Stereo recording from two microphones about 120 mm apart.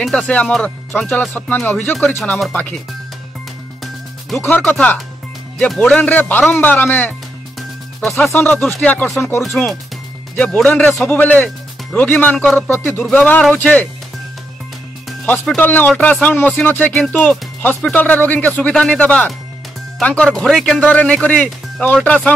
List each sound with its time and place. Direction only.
0.0 s speech: 5° left (ahead or behind)
4.4 s speech: 15° left (ahead or behind)
8.0 s speech: centre (ahead or behind)
15.4 s speech: 15° left (ahead or behind)